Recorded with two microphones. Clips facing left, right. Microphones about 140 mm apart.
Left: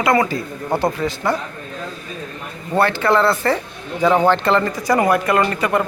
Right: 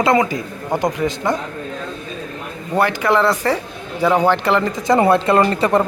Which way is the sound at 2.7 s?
15° right (ahead or behind).